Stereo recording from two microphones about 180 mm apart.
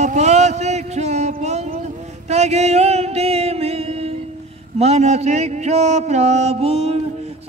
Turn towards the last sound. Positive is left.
turn(degrees=-35)  # may be behind; listen again after turning